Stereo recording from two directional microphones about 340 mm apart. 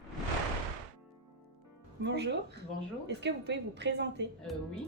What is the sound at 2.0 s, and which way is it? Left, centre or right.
A woman's voice, right.